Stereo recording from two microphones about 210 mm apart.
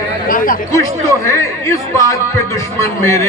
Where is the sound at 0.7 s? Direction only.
15° left (ahead or behind).